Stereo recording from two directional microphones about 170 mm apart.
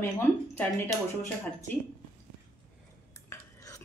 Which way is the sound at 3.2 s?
20° left (ahead or behind).